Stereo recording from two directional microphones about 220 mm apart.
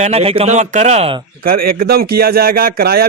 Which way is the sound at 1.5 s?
40° right (ahead or behind).